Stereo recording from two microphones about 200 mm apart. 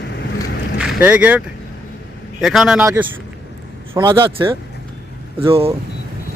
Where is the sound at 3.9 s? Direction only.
15° right (ahead or behind).